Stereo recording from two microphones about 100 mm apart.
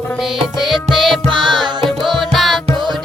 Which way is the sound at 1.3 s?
50° right (ahead or behind).